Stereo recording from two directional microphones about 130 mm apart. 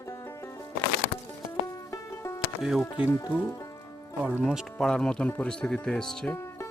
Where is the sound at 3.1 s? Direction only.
20° left (ahead or behind).